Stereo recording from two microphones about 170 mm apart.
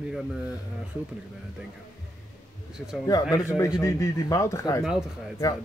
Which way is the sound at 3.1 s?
20° left (ahead or behind).